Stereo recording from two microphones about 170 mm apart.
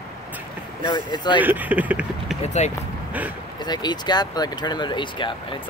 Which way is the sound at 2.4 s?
40° left (ahead or behind).